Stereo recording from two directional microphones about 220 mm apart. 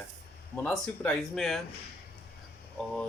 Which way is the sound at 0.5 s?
5° left (ahead or behind).